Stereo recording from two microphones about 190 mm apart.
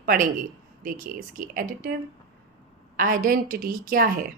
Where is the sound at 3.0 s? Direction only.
45° right (ahead or behind).